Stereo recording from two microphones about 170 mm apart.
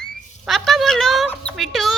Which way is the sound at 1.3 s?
5° left (ahead or behind).